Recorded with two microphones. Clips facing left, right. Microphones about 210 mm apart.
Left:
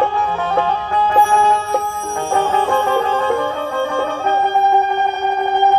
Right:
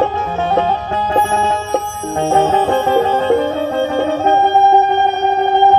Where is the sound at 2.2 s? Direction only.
20° right (ahead or behind).